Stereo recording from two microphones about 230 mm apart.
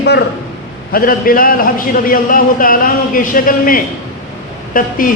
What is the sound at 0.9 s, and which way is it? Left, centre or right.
A man's voice, left.